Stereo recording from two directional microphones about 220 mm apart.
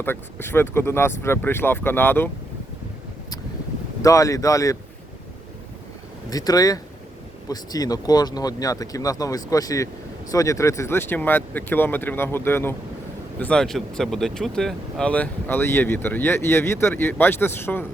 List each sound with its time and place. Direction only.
0.0 s speech: 10° left (ahead or behind)
4.0 s speech: 15° left (ahead or behind)
6.3 s speech: 15° left (ahead or behind)